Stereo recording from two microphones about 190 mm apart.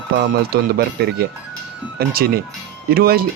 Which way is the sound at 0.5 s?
55° right (ahead or behind).